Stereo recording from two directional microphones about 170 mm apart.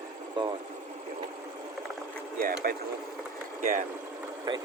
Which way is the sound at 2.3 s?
55° right (ahead or behind).